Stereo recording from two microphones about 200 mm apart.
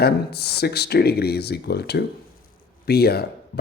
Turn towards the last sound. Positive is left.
turn(degrees=50)  # may be behind; listen again after turning